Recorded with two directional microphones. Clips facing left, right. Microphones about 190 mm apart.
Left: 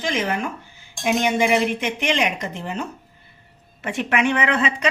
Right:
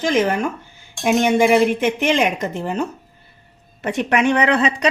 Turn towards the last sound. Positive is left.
turn(degrees=-35)  # may be behind; listen again after turning